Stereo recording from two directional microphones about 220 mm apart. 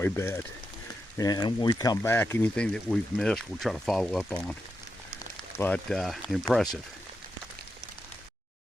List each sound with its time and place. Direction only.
0.0 s speech: 10° left (ahead or behind)